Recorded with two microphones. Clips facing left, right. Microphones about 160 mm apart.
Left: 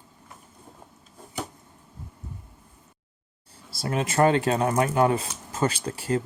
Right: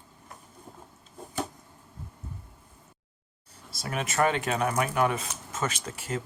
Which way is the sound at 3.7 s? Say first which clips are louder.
Left 5 dB; 30° left (ahead or behind).